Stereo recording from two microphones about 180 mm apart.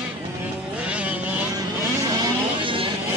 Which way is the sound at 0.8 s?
5° right (ahead or behind).